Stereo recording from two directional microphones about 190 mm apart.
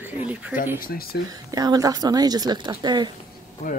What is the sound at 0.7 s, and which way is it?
Speech, 50° left (ahead or behind).